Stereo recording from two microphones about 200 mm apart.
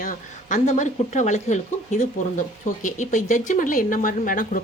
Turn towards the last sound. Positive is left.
turn(degrees=40)  # may be behind; listen again after turning